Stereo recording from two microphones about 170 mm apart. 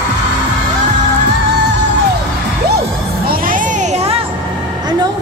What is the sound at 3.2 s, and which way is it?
Music, 55° right (ahead or behind).